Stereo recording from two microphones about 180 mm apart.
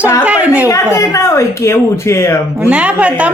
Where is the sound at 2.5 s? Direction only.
5° right (ahead or behind).